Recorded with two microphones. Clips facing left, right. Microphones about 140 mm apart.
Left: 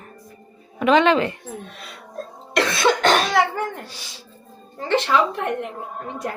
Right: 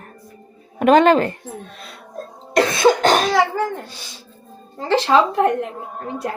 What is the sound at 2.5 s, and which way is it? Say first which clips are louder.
Speech: right 4 dB; 40° right (ahead or behind).